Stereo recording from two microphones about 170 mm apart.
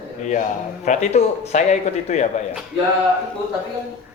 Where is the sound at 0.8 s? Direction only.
45° left (ahead or behind).